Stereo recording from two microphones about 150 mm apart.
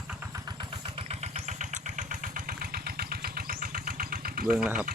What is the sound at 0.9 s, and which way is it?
Vehicle, 45° right (ahead or behind).